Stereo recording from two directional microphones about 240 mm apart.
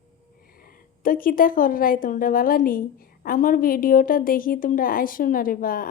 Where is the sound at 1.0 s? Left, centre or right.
Left.